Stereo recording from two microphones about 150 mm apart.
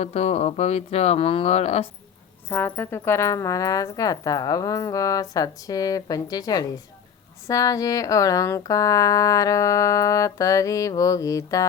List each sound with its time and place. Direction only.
0.0 s speech: 45° left (ahead or behind)
2.5 s speech: 15° left (ahead or behind)